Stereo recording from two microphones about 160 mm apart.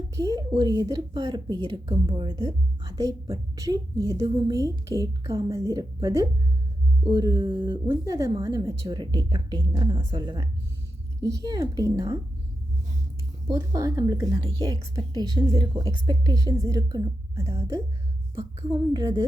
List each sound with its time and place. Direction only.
0.2 s speech: 20° right (ahead or behind)
13.5 s speech: 20° right (ahead or behind)